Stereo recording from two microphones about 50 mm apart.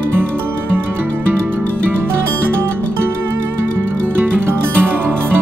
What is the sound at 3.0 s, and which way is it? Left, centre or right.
Music, right.